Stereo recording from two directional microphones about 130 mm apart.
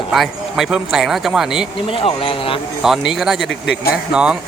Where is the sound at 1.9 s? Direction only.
45° left (ahead or behind).